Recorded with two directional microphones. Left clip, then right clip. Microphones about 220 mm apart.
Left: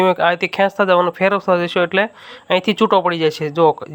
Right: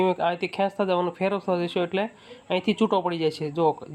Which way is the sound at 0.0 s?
15° left (ahead or behind).